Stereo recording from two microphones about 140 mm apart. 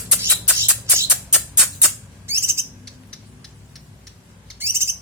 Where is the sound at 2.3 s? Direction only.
20° right (ahead or behind).